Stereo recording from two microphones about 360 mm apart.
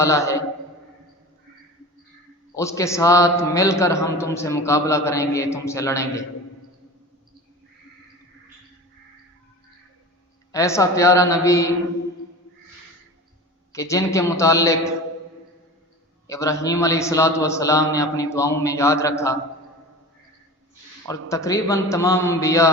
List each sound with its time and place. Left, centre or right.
0.0 s a man's voice: centre
2.6 s a man's voice: centre
10.5 s a man's voice: centre
13.7 s a man's voice: centre
16.2 s a man's voice: centre
21.1 s a man's voice: centre